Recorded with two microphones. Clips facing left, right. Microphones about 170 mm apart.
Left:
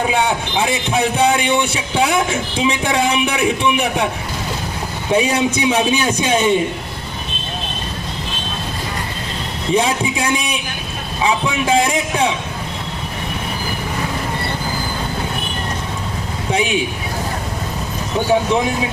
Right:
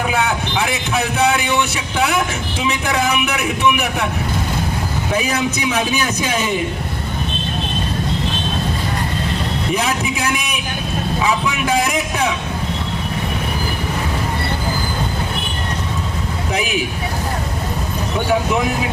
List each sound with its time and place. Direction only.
0.1 s a man's voice: 30° left (ahead or behind)
5.1 s a man's voice: 30° left (ahead or behind)
9.7 s a man's voice: 30° left (ahead or behind)
16.5 s a man's voice: 25° left (ahead or behind)